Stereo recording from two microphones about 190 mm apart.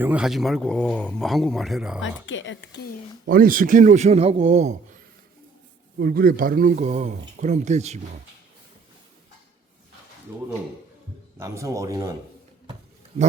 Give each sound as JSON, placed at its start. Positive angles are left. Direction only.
{"t": 0.0, "sound": "speech", "side_deg": -5}
{"t": 2.0, "sound": "a woman's voice", "side_deg": 80}
{"t": 3.2, "sound": "speech", "side_deg": -50}
{"t": 6.0, "sound": "speech", "side_deg": -50}
{"t": 10.3, "sound": "speech", "side_deg": -15}